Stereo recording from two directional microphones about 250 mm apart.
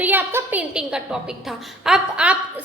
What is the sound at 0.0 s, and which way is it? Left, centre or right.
A woman's voice, centre.